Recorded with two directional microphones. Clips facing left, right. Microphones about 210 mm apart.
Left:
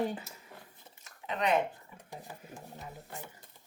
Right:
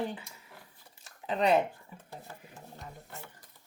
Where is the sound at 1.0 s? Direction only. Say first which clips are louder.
Right 4 dB; 35° right (ahead or behind).